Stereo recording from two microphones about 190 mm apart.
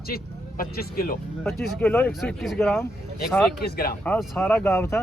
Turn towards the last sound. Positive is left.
turn(degrees=15)  # may be behind; listen again after turning